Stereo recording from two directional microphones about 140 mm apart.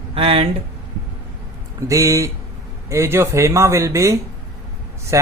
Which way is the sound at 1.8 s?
25° right (ahead or behind).